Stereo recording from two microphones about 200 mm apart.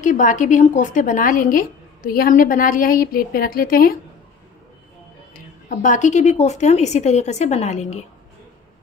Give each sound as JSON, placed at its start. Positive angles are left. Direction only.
{"t": 0.0, "sound": "a woman's voice", "side_deg": 40}
{"t": 5.7, "sound": "a woman's voice", "side_deg": 40}